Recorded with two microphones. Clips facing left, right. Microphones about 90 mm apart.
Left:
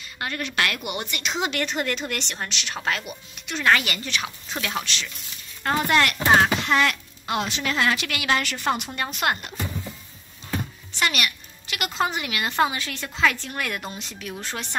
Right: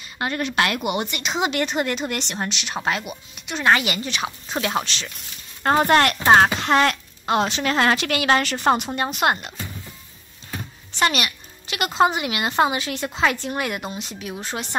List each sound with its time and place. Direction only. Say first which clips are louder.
0.2 s speech: right 4 dB; 25° right (ahead or behind)
5.6 s speech: right 5 dB; 40° right (ahead or behind); by 9.5 s 20° right (ahead or behind)
11.0 s speech: right 4 dB; 30° right (ahead or behind); by 14.8 s 10° right (ahead or behind)